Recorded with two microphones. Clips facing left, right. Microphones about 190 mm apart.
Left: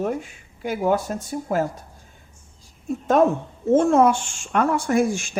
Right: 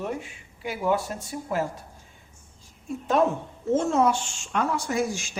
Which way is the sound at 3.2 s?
45° left (ahead or behind).